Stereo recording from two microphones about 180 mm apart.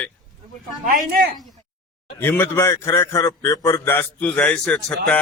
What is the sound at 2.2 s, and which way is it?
A man's voice, 10° left (ahead or behind).